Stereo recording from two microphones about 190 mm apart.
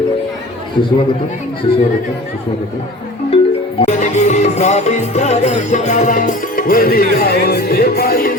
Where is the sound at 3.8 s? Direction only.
40° left (ahead or behind).